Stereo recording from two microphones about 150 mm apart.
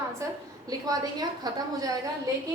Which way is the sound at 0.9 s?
25° right (ahead or behind).